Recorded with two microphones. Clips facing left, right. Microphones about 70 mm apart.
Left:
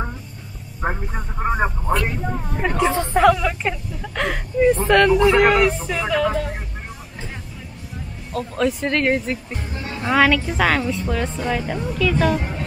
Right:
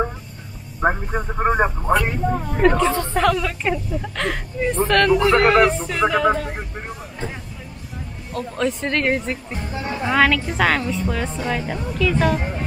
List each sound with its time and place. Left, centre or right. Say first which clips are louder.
1.5 s speech: right 2 dB; centre
2.6 s a woman's voice: right 3 dB; centre
8.3 s a woman's voice: left 2 dB; centre